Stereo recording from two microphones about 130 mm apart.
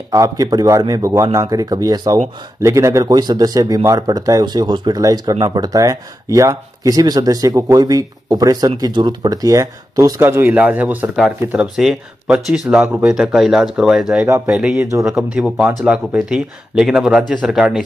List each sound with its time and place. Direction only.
0.1 s speech: 25° right (ahead or behind); by 14.2 s 5° right (ahead or behind)
14.2 s speech: 20° right (ahead or behind)
14.5 s speech: 5° right (ahead or behind)